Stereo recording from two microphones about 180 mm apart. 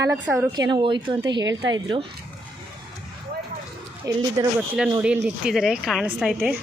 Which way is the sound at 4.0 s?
20° right (ahead or behind).